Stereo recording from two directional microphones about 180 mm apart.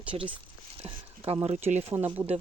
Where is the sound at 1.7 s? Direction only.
35° right (ahead or behind).